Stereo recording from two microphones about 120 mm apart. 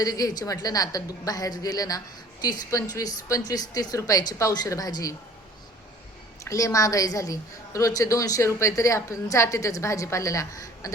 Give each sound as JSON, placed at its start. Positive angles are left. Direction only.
{"t": 0.0, "sound": "a woman's voice", "side_deg": 30}
{"t": 6.4, "sound": "a woman's voice", "side_deg": 25}